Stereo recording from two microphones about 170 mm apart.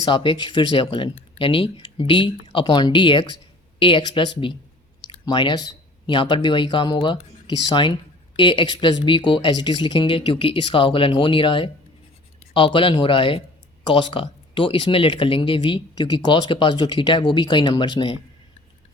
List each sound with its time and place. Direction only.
0.0 s speech: 30° left (ahead or behind)